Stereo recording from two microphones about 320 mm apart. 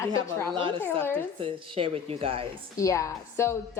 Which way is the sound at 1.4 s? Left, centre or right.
Centre.